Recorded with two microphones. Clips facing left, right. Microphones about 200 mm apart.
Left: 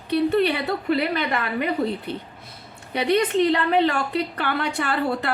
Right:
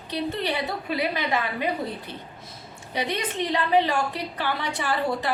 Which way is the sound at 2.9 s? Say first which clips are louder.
Left 8 dB; 60° left (ahead or behind).